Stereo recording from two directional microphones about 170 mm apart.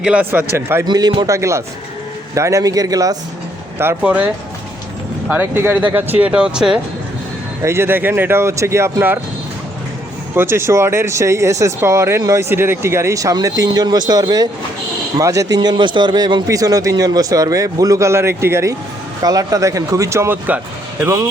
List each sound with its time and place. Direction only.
0.0 s a man's voice: 10° right (ahead or behind)
5.3 s speech: 15° right (ahead or behind)
7.6 s speech: 15° right (ahead or behind)
10.3 s a man's voice: 15° right (ahead or behind)